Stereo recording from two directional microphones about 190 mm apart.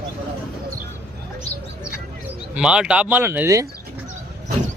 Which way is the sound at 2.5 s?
5° right (ahead or behind).